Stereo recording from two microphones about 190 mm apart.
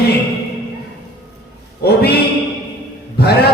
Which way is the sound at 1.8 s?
55° left (ahead or behind).